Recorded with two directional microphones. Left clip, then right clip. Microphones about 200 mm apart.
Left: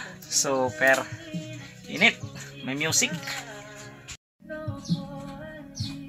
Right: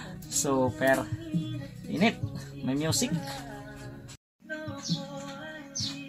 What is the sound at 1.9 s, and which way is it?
Speech, 5° left (ahead or behind).